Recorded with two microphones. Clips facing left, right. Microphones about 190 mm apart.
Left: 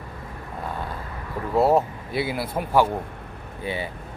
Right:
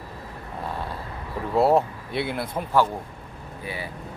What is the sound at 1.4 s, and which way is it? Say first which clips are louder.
Speech: even; centre (ahead or behind).